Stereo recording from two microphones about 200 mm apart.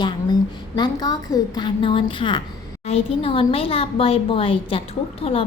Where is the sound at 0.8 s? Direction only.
20° left (ahead or behind).